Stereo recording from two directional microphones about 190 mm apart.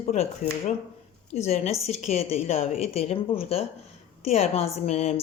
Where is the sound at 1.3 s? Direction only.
35° left (ahead or behind).